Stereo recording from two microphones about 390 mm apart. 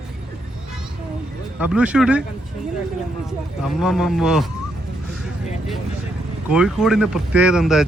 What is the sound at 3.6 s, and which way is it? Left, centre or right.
Speech, centre.